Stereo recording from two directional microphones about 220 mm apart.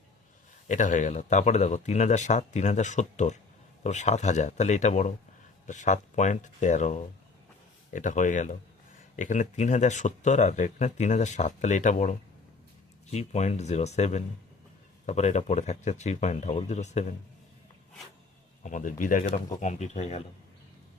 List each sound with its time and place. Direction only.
0.7 s speech: 35° left (ahead or behind)
18.6 s speech: 35° left (ahead or behind)